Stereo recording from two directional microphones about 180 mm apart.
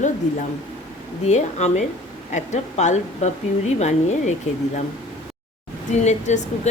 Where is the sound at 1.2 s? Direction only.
40° left (ahead or behind).